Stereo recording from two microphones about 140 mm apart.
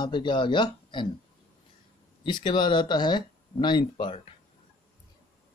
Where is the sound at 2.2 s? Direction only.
35° left (ahead or behind).